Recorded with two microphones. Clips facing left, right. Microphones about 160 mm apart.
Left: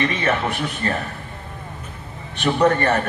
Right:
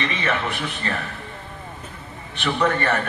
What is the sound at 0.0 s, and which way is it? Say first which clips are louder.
Speech: left 4 dB; 45° left (ahead or behind).